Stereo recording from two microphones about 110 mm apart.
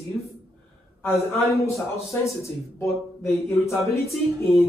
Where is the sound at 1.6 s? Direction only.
25° left (ahead or behind).